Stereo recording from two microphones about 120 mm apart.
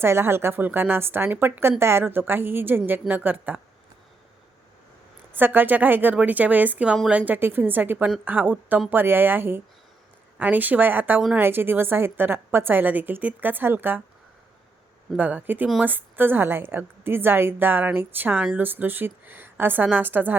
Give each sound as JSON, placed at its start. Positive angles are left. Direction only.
{"t": 0.0, "sound": "a woman's voice", "side_deg": -20}
{"t": 5.3, "sound": "a woman's voice", "side_deg": -15}
{"t": 15.1, "sound": "a woman's voice", "side_deg": -15}